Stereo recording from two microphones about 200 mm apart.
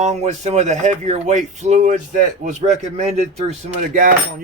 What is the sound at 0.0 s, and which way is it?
Speech, 35° right (ahead or behind).